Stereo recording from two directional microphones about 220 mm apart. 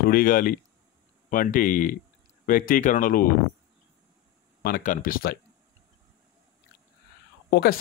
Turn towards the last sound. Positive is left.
turn(degrees=50)  # may be behind; listen again after turning